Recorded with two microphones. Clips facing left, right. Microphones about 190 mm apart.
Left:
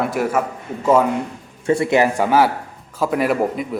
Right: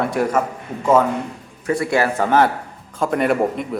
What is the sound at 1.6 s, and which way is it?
A man's voice, 25° left (ahead or behind).